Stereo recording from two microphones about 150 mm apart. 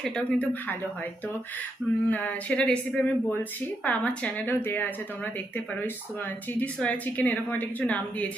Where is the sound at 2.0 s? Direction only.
10° left (ahead or behind).